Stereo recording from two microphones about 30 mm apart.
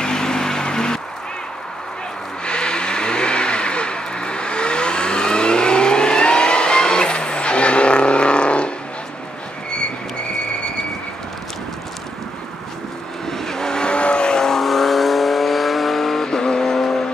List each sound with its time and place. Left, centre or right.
0.0 s music: left
2.4 s vehicle: left
13.3 s vehicle: centre
13.9 s vehicle: left
14.6 s vehicle: centre
16.3 s vehicle: left
16.7 s vehicle: centre